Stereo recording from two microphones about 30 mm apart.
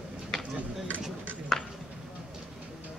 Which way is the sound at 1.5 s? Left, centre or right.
Centre.